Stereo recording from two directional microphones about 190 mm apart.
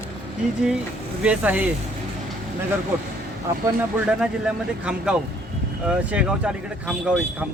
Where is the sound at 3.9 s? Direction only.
5° right (ahead or behind).